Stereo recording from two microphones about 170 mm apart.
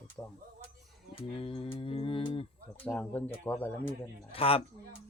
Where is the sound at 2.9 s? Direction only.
10° left (ahead or behind).